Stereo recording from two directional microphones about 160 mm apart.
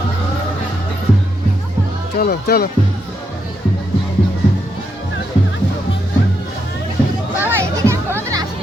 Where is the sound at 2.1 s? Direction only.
70° left (ahead or behind).